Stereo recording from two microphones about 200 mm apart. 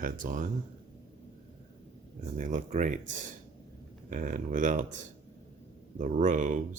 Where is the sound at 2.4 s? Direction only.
40° right (ahead or behind).